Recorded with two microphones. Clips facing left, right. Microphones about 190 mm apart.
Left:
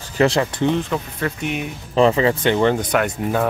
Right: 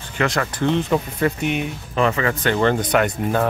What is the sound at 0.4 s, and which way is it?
Speech, 20° left (ahead or behind).